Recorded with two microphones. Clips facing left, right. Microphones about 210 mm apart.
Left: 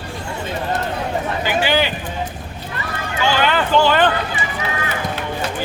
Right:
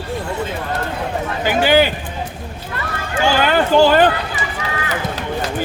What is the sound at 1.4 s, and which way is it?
Speech, 50° right (ahead or behind).